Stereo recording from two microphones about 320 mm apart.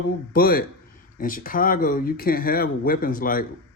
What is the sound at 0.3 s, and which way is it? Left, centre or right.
Speech, left.